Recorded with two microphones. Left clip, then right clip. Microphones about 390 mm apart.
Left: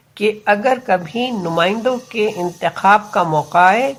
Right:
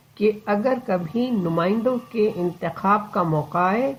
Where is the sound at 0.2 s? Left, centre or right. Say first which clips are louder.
Left 6 dB; left.